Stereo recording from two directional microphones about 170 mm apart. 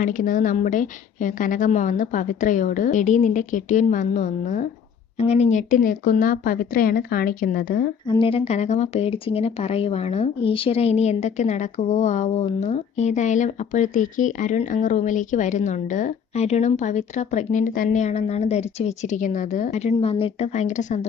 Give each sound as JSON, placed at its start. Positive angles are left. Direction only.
{"t": 0.0, "sound": "speech", "side_deg": 50}
{"t": 8.0, "sound": "speech", "side_deg": 30}